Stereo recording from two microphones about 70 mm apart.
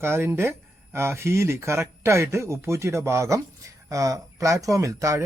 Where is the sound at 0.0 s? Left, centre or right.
Right.